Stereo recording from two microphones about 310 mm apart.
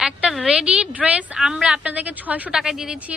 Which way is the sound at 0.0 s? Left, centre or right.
Centre.